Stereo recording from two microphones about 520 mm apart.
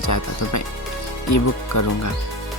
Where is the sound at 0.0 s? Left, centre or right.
Left.